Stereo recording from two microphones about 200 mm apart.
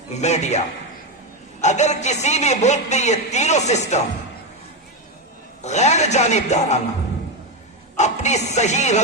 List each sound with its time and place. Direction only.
0.1 s speech: 35° left (ahead or behind)
1.6 s speech: 35° left (ahead or behind)
5.6 s speech: 35° left (ahead or behind)
7.9 s speech: 35° left (ahead or behind)